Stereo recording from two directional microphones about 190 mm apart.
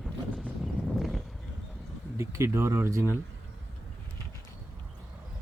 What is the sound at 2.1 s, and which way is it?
Speech, 15° right (ahead or behind).